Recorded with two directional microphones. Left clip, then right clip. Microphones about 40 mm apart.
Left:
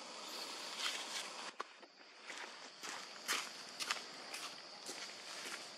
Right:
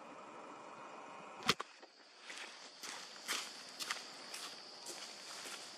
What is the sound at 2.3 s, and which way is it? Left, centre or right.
Walk, left.